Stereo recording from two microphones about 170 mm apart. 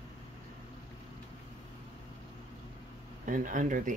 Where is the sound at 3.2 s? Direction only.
50° right (ahead or behind).